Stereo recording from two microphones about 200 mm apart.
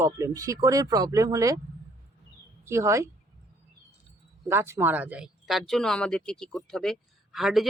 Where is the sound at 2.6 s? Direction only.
15° right (ahead or behind).